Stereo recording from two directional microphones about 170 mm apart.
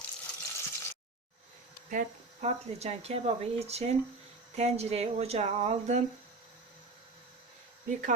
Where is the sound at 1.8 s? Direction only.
45° right (ahead or behind).